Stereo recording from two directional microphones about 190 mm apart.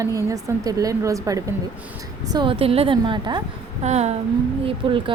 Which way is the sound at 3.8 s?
35° right (ahead or behind).